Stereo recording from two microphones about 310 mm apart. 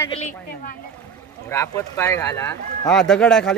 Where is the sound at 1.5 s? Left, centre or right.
Centre.